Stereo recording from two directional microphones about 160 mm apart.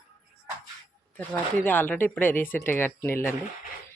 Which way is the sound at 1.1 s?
10° left (ahead or behind).